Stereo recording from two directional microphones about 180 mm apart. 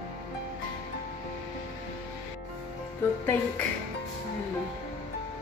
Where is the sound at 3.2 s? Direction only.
10° left (ahead or behind).